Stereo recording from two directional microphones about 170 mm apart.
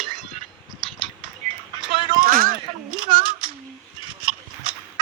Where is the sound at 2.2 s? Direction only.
55° right (ahead or behind).